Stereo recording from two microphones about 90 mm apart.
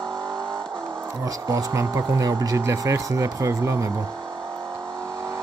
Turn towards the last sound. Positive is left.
turn(degrees=-35)  # may be behind; listen again after turning